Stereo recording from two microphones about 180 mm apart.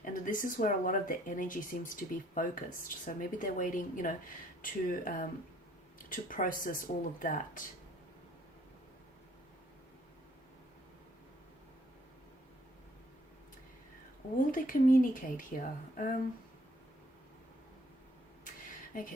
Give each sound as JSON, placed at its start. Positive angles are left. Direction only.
{"t": 0.0, "sound": "speech", "side_deg": 45}
{"t": 14.5, "sound": "speech", "side_deg": 50}
{"t": 18.9, "sound": "speech", "side_deg": 45}